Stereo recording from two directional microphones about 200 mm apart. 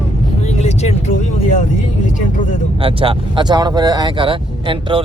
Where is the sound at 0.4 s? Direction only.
35° left (ahead or behind).